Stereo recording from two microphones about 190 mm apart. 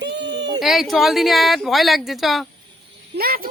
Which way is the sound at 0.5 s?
Centre (ahead or behind).